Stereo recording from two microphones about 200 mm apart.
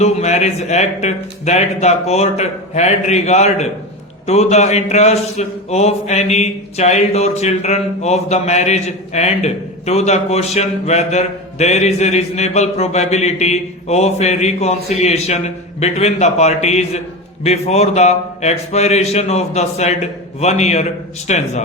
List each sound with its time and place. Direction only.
0.0 s mantra: 35° left (ahead or behind)